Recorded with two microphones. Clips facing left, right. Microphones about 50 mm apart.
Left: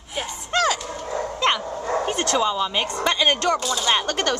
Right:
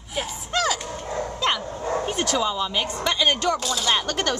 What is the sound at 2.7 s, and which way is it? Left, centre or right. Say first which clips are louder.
Speech: left 2 dB; left.